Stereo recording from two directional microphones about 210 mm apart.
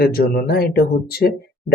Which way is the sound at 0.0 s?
45° left (ahead or behind).